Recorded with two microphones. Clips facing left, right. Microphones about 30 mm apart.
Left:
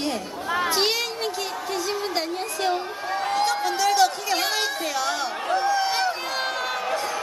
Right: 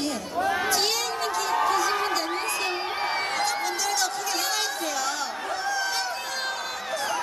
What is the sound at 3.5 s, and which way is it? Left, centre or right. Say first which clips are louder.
Chatter: left 5 dB; left.